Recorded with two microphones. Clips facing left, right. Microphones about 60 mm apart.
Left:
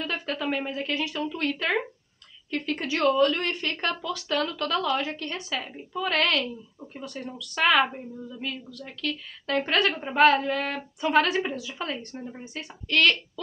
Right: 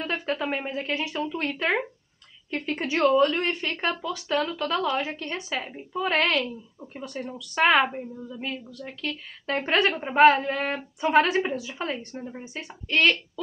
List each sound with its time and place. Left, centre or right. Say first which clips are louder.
0.0 s a woman's voice: right 2 dB; centre
7.8 s speech: right 1 dB; centre
8.4 s a woman's voice: right 2 dB; right